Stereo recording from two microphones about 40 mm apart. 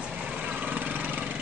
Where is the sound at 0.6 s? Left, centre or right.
Right.